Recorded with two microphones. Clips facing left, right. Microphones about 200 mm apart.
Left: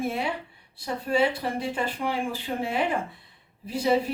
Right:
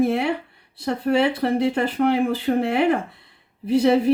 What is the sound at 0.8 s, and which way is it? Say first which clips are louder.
Speech: right 5 dB; 65° right (ahead or behind).